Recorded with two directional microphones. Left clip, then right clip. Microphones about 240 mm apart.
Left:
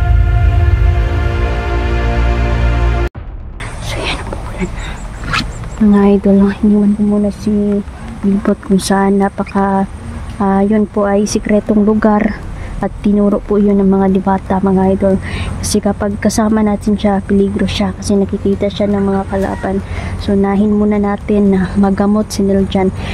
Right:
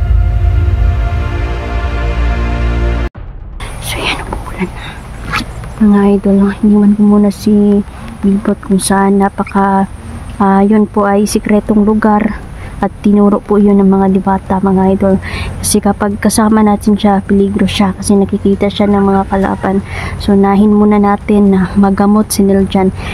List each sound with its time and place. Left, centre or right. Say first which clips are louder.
3.8 s a sound: right 4 dB; centre
5.3 s zipper: even; centre
6.8 s speech: right 4 dB; centre
8.4 s speech: even; centre